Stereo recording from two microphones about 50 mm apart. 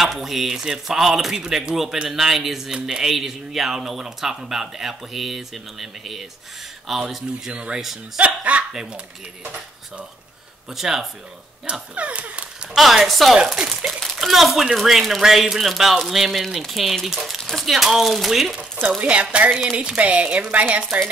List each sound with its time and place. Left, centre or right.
0.0 s speech: centre
7.5 s speech: centre
10.7 s speech: centre
11.9 s speech: right
12.7 s speech: centre
13.9 s speech: centre
18.9 s speech: right